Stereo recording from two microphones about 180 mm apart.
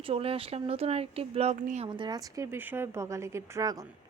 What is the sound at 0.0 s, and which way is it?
Speech, 30° right (ahead or behind).